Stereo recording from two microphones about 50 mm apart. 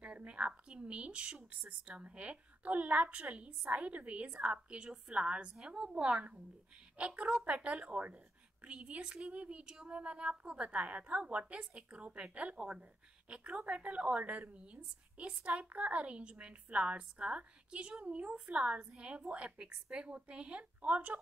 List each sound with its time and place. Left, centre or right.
0.0 s a woman's voice: right